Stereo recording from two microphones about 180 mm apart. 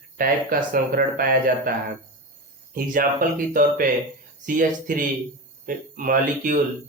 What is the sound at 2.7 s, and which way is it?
Speech, 50° right (ahead or behind).